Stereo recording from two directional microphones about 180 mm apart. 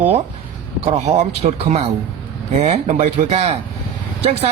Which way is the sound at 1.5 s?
35° right (ahead or behind).